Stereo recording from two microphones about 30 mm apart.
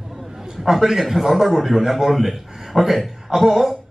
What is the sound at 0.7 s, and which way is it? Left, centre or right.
A man's voice, centre.